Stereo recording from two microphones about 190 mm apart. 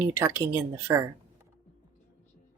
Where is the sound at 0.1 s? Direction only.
15° right (ahead or behind).